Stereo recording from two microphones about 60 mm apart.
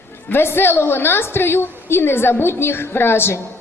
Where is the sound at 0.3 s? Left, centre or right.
Left.